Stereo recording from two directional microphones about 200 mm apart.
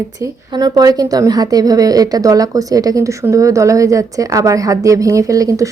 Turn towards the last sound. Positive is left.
turn(degrees=-15)  # may be behind; listen again after turning